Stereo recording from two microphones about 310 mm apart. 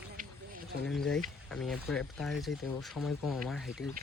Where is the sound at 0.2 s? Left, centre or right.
Right.